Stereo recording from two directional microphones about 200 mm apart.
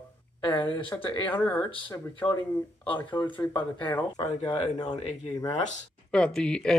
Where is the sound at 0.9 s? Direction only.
10° left (ahead or behind).